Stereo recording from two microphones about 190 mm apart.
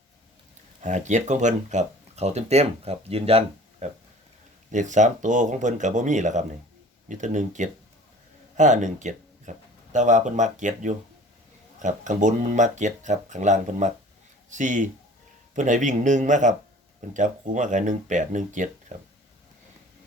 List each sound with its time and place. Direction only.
0.8 s speech: 40° right (ahead or behind)